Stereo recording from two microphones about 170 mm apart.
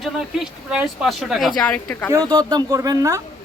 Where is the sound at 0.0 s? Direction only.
5° right (ahead or behind).